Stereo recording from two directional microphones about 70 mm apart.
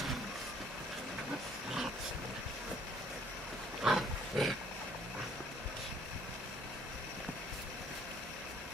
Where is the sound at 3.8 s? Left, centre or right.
Centre.